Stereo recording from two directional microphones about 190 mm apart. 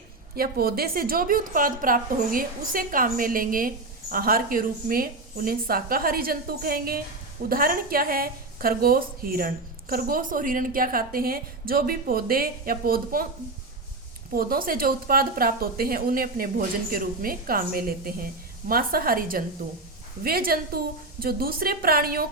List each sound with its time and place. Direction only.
0.3 s a woman's voice: 50° right (ahead or behind)
14.3 s a woman's voice: 50° right (ahead or behind)